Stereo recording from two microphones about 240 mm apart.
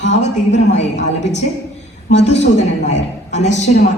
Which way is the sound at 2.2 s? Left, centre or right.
Left.